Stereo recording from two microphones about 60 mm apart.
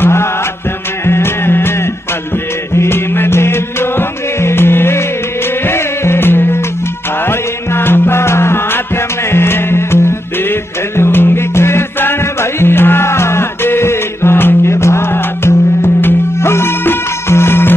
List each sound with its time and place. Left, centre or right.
0.0 s music: left